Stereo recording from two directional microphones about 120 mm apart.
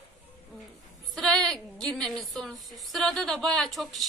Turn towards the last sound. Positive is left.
turn(degrees=0)  # may be behind; listen again after turning